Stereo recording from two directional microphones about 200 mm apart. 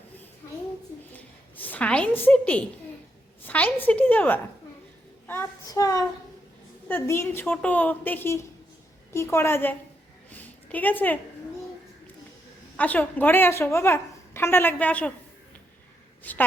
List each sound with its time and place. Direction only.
1.1 s a woman's voice: 10° left (ahead or behind)
10.3 s a sound: 10° left (ahead or behind)
12.7 s a woman's voice: 10° left (ahead or behind)
16.2 s a woman's voice: 10° left (ahead or behind)